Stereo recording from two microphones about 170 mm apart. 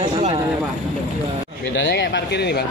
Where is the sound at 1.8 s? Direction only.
90° left.